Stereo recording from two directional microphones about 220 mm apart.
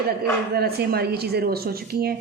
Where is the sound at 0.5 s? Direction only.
45° right (ahead or behind).